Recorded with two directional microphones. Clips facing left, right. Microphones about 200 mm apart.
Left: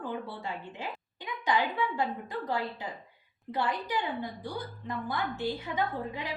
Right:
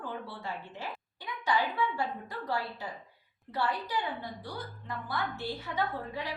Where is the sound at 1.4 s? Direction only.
20° left (ahead or behind).